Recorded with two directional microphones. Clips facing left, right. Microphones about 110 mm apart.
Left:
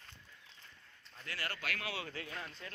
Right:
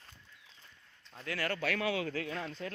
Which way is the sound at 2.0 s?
90° right.